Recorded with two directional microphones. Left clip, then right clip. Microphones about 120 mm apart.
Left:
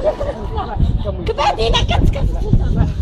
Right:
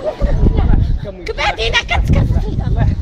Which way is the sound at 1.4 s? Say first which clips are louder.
Right 1 dB; 20° right (ahead or behind).